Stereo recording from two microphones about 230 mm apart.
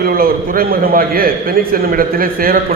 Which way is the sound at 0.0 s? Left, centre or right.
Right.